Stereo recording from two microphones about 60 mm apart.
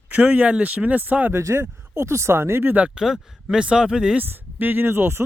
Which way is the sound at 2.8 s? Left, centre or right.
Centre.